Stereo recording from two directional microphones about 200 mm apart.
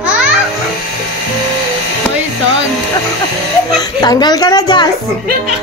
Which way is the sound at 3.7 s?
20° left (ahead or behind).